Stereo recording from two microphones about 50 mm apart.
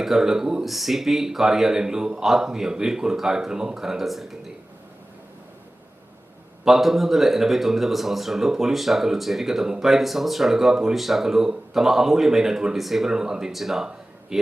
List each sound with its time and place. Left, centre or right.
0.0 s speech: centre
6.7 s a man's voice: centre